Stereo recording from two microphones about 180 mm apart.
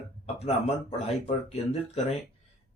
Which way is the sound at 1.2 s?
35° left (ahead or behind).